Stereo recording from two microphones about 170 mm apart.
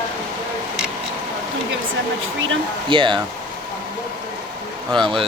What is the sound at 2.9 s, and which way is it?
Speech, 30° right (ahead or behind).